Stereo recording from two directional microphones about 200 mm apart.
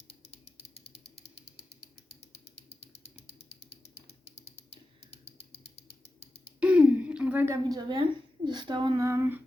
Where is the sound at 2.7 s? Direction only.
30° left (ahead or behind).